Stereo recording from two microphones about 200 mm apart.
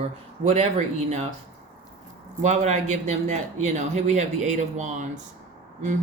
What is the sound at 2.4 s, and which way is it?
Speech, 35° right (ahead or behind).